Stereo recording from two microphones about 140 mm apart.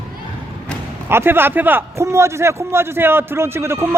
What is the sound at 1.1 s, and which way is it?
A man's voice, 15° right (ahead or behind).